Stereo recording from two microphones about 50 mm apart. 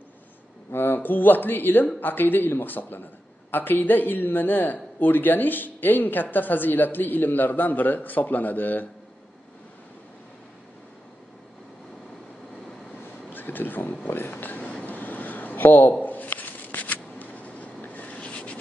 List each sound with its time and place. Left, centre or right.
0.7 s speech: left
13.3 s speech: left
14.7 s a sound: left
16.0 s shuffling cards: left